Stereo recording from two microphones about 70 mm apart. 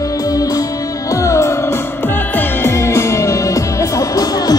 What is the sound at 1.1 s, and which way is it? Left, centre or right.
Music, left.